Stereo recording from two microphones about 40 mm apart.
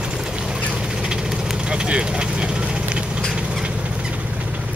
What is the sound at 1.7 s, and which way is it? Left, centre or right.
Vehicle, right.